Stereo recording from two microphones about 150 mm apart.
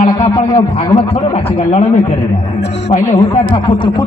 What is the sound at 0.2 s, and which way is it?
Speech, 40° left (ahead or behind).